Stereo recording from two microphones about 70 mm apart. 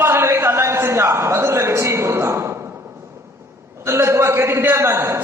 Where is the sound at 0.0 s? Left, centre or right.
Right.